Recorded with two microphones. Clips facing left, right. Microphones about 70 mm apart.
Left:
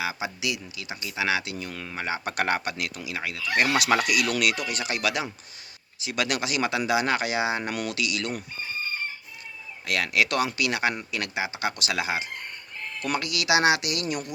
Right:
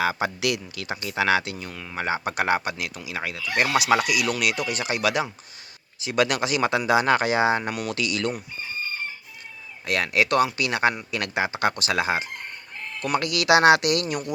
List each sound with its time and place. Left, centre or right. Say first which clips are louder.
0.0 s speech: right 6 dB; right
0.3 s speech: right 5 dB; right
1.7 s speech: left 1 dB; centre
2.0 s speech: right 4 dB; right
2.3 s speech: right 1 dB; centre
3.5 s speech: right 2 dB; centre; by 8.3 s right
9.8 s speech: right 2 dB; right